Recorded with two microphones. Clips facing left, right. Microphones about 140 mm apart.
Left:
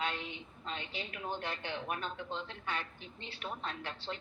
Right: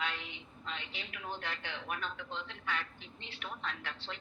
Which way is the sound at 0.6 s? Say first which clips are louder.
Left 3 dB; 40° left (ahead or behind).